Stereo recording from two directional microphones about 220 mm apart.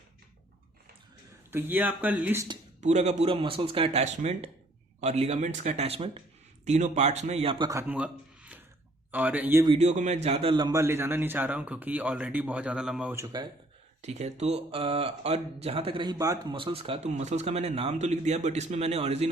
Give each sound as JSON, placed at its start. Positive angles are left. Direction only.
{"t": 1.5, "sound": "a man's voice", "side_deg": -10}
{"t": 2.8, "sound": "speech", "side_deg": -30}
{"t": 7.7, "sound": "a man's voice", "side_deg": -10}
{"t": 9.7, "sound": "a man's voice", "side_deg": -30}
{"t": 14.0, "sound": "speech", "side_deg": -30}